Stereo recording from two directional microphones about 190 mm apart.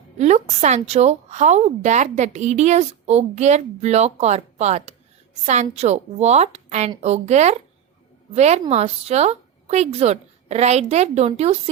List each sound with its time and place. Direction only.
0.2 s a woman's voice: 35° right (ahead or behind)